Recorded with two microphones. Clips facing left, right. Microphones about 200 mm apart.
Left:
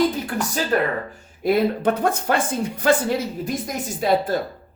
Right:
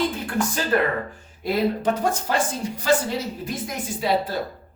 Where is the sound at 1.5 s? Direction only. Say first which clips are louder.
Left 3 dB; 55° left (ahead or behind).